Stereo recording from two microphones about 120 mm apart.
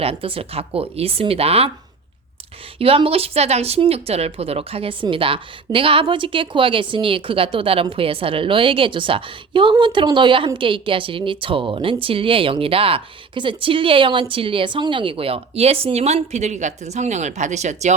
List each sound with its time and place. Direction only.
0.0 s speech: 50° right (ahead or behind)
2.7 s speech: 50° right (ahead or behind); by 17.9 s 75° right (ahead or behind)